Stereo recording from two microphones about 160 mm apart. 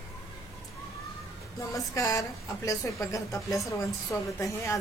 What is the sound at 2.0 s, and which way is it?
Speech, 20° left (ahead or behind).